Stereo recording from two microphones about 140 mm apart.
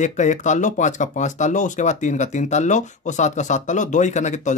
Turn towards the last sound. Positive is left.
turn(degrees=55)  # may be behind; listen again after turning